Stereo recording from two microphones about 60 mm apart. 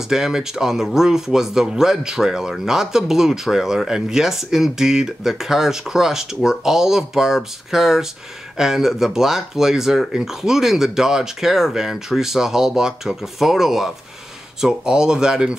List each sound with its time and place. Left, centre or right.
0.1 s speech: centre